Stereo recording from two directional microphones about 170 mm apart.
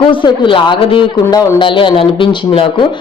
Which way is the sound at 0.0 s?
30° left (ahead or behind).